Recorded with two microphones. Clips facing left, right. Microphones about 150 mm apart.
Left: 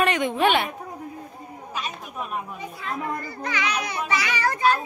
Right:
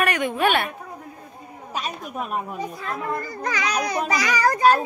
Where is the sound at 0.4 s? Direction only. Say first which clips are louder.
Even; 20° left (ahead or behind).